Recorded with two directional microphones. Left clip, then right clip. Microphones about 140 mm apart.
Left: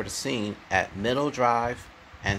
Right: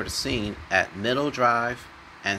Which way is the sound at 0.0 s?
25° left (ahead or behind).